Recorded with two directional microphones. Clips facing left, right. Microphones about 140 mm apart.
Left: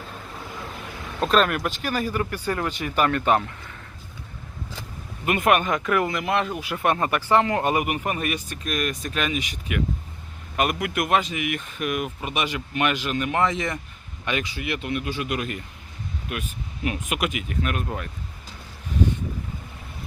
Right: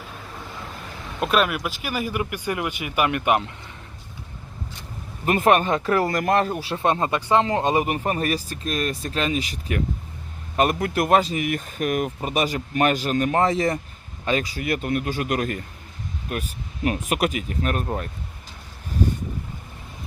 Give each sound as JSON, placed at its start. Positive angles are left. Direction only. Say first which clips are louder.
{"t": 1.2, "sound": "speech", "louder": "left 1 dB", "side_deg": -10}
{"t": 5.2, "sound": "a man's voice", "louder": "right 2 dB", "side_deg": -35}